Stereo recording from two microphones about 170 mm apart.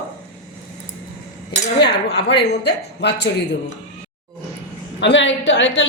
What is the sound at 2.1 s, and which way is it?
Speech, 85° left.